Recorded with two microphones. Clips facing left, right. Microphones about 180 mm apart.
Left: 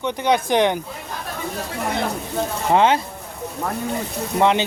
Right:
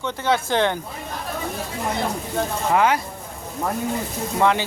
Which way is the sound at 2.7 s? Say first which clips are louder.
Left 3 dB; 25° left (ahead or behind).